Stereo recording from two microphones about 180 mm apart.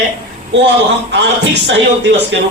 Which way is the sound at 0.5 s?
70° right (ahead or behind).